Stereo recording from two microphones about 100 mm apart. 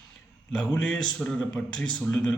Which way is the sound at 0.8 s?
5° left (ahead or behind).